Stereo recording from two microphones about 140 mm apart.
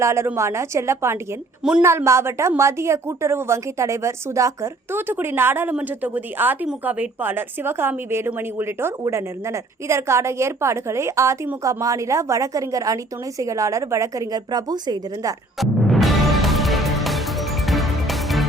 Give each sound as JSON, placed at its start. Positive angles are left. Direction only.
{"t": 0.0, "sound": "a woman's voice", "side_deg": -20}
{"t": 15.5, "sound": "music", "side_deg": 0}